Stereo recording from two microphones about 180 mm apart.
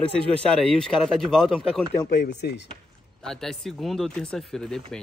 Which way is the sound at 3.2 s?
5° left (ahead or behind).